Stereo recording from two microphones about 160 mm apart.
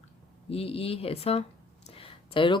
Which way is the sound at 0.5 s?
35° left (ahead or behind).